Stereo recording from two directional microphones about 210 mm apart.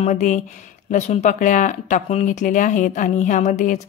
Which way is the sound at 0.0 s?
35° left (ahead or behind).